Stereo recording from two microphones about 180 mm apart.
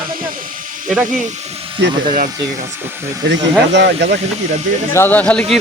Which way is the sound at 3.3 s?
75° right (ahead or behind).